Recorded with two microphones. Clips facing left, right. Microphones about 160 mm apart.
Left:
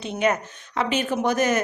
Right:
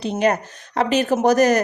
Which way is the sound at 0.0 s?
35° right (ahead or behind).